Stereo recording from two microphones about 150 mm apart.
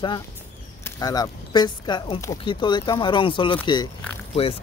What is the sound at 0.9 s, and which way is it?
Speech, 25° left (ahead or behind).